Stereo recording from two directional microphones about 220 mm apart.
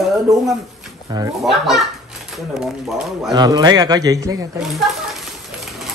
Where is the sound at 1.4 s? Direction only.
Centre (ahead or behind).